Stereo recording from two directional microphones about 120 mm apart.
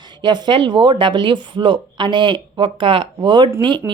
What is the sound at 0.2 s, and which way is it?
Speech, 40° right (ahead or behind).